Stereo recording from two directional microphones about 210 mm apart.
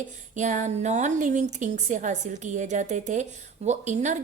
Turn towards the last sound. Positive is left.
turn(degrees=-35)  # may be behind; listen again after turning